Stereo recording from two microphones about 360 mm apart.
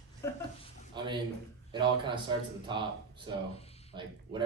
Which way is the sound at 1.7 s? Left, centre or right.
Centre.